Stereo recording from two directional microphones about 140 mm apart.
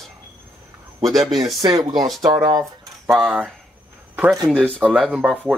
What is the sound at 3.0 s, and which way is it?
Speech, 5° right (ahead or behind).